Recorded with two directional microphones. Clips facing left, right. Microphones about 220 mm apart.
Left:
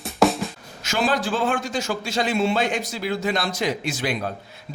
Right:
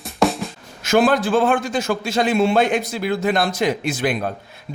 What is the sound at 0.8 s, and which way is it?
A man's voice, 55° right (ahead or behind).